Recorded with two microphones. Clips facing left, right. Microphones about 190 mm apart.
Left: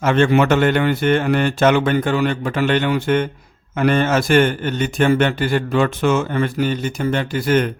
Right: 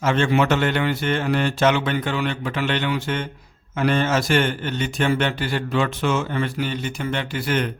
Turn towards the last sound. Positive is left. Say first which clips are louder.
# left 6 dB
turn(degrees=45)  # may be behind; listen again after turning